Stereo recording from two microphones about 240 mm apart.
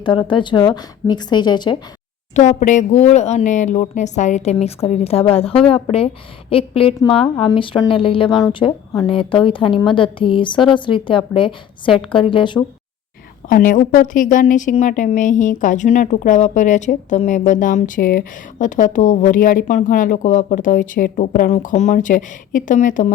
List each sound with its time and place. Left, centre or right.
0.0 s speech: centre
2.3 s speech: left
13.5 s a woman's voice: left